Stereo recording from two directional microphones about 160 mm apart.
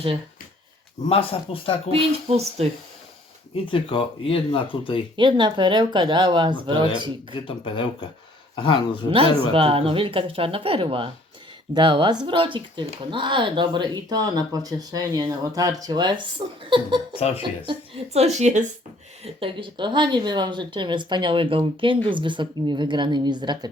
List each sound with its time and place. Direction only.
1.0 s speech: 35° left (ahead or behind)
1.9 s speech: 40° right (ahead or behind)
3.7 s speech: 35° left (ahead or behind)
5.1 s a woman's voice: 30° right (ahead or behind)
7.4 s speech: 35° left (ahead or behind)
9.0 s a woman's voice: 35° right (ahead or behind)
17.2 s speech: 40° left (ahead or behind)
17.7 s a woman's voice: 40° right (ahead or behind)
19.2 s a woman's voice: 35° right (ahead or behind)